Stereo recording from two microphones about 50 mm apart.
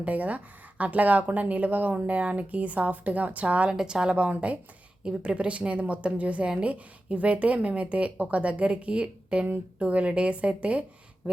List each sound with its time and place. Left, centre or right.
0.0 s speech: right
3.8 s a woman's voice: centre